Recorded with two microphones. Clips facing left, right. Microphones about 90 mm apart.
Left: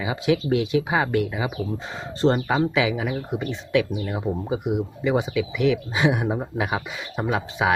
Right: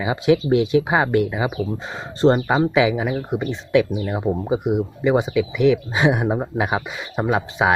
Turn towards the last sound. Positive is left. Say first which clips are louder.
# right 4 dB
turn(degrees=-30)  # may be behind; listen again after turning